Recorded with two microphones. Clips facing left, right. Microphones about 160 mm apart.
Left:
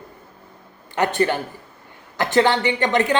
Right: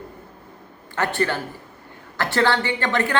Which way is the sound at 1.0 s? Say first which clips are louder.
Left 3 dB; 15° left (ahead or behind).